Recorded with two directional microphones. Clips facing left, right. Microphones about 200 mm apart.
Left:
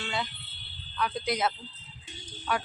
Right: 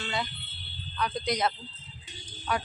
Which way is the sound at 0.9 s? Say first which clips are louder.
Even; 5° left (ahead or behind).